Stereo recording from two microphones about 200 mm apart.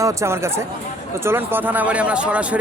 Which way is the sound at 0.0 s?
15° right (ahead or behind).